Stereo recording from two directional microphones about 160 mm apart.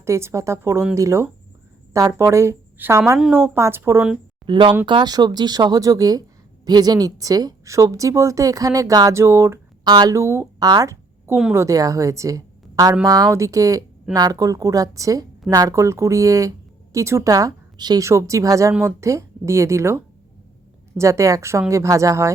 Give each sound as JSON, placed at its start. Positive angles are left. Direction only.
{"t": 0.0, "sound": "speech", "side_deg": -15}
{"t": 4.4, "sound": "a woman's voice", "side_deg": -30}
{"t": 21.0, "sound": "speech", "side_deg": -20}